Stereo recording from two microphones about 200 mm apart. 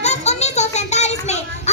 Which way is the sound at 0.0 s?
35° left (ahead or behind).